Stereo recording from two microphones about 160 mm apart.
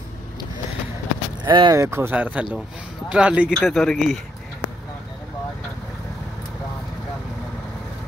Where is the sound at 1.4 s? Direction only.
25° right (ahead or behind); by 4.2 s centre (ahead or behind).